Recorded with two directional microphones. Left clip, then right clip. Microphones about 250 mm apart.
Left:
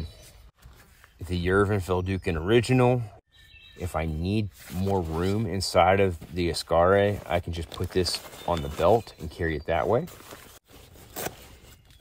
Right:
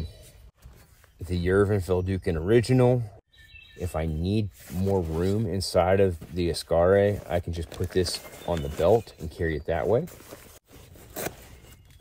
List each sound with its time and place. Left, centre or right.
1.3 s speech: centre
7.7 s speech: centre
8.9 s speech: centre
10.0 s zipper: centre